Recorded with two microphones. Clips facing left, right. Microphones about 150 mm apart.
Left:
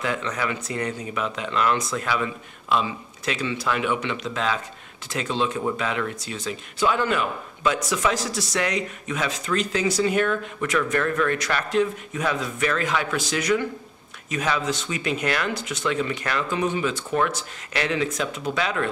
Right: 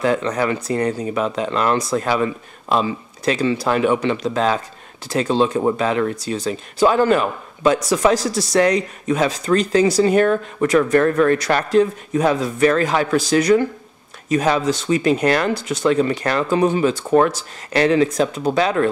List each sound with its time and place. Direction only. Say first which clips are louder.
0.0 s speech: right 8 dB; 35° right (ahead or behind)